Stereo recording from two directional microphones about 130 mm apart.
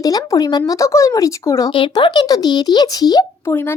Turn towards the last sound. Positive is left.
turn(degrees=30)  # may be behind; listen again after turning